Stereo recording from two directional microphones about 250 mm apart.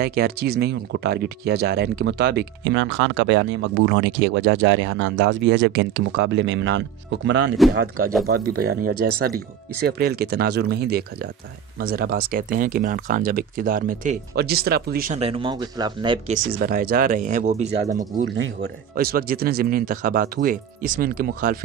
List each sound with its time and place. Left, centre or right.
0.0 s speech: right
7.6 s speech: centre
8.9 s speech: right; by 16.3 s centre
16.5 s speech: right
18.2 s speech: right